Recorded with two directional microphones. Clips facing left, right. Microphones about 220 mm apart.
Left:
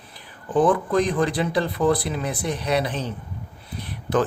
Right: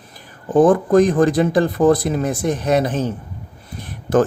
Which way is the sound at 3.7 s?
45° right (ahead or behind).